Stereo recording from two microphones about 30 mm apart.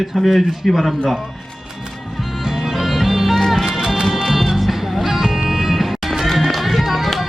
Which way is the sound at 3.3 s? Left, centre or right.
Centre.